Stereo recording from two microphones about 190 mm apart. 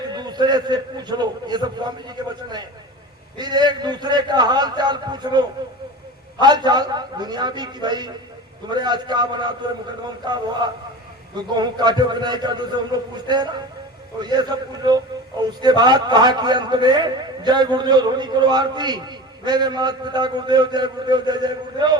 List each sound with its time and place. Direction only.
0.2 s a man's voice: 20° right (ahead or behind)
11.5 s a man's voice: 20° right (ahead or behind)